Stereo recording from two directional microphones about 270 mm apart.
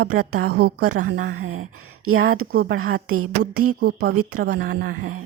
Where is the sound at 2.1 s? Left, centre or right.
Right.